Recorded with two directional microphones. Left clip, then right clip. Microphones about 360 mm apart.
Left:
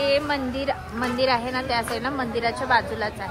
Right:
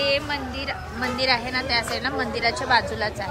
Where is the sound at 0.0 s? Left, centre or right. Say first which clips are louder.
Left 1 dB; centre.